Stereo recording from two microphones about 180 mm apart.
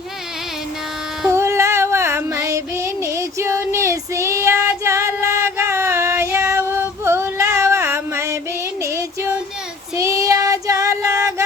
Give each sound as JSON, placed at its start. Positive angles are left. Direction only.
{"t": 1.3, "sound": "female singing", "side_deg": -15}
{"t": 8.8, "sound": "child singing", "side_deg": -15}